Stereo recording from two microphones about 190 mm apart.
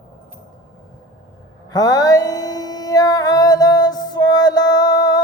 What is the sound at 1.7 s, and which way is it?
Mantra, 20° left (ahead or behind).